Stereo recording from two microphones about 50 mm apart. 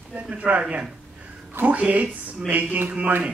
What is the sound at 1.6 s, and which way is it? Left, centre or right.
Speech, right.